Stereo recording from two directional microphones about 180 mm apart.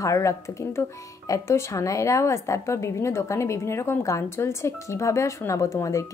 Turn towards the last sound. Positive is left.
turn(degrees=15)  # may be behind; listen again after turning